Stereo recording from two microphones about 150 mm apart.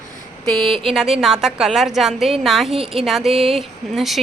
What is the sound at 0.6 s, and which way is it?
Speech, 35° right (ahead or behind).